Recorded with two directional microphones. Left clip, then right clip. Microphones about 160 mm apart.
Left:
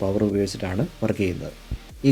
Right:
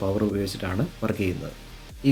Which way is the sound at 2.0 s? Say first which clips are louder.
Left 3 dB; 45° left (ahead or behind).